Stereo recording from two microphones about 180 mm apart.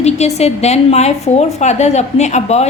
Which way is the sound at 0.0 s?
35° left (ahead or behind).